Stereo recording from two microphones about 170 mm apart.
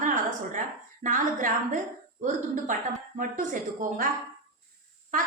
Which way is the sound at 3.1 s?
50° right (ahead or behind).